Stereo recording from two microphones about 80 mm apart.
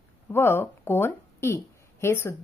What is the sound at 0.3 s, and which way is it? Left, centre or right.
A woman's voice, left.